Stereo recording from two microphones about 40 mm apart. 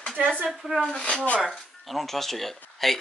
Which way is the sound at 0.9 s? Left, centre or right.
Centre.